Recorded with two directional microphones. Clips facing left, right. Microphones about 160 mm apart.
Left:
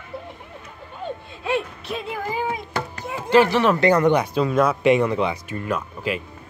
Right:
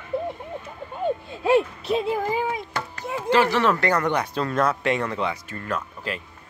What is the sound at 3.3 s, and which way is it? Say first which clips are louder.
Speech: left 3 dB; 15° left (ahead or behind).